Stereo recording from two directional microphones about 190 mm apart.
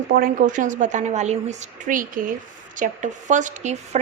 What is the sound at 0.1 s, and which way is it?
A woman's voice, 45° right (ahead or behind).